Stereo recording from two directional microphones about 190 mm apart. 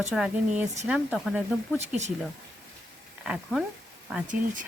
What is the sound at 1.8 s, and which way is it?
Speech, 35° right (ahead or behind).